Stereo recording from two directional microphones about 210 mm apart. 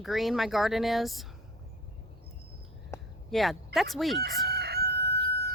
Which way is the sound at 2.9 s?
15° left (ahead or behind).